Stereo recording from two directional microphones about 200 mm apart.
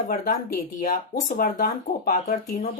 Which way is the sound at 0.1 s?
45° left (ahead or behind).